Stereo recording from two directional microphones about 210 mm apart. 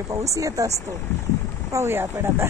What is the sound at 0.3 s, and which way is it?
Speech, 15° right (ahead or behind).